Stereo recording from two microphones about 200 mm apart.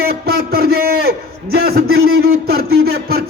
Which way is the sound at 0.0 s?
50° right (ahead or behind).